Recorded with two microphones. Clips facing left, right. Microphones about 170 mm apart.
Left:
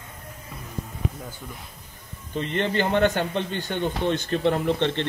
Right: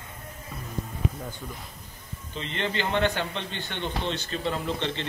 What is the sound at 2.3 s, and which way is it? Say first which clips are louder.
A man's voice: left 6 dB; 50° left (ahead or behind).